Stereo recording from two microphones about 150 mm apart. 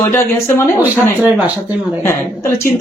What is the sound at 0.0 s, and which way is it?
Speech, 20° left (ahead or behind).